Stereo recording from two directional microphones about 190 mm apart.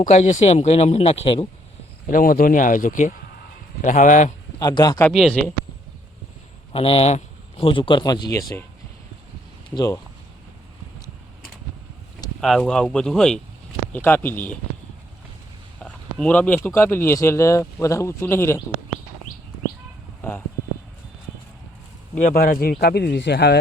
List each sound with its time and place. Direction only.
0.0 s speech: 40° left (ahead or behind)
2.0 s speech: 45° left (ahead or behind)
4.6 s speech: 20° left (ahead or behind)
5.0 s speech: 5° left (ahead or behind)
6.7 s speech: 30° left (ahead or behind)
9.6 s speech: 20° left (ahead or behind)
12.4 s a man's voice: 5° left (ahead or behind)
15.8 s a man's voice: 5° left (ahead or behind)
22.2 s speech: 45° left (ahead or behind); by 23.6 s 60° left (ahead or behind)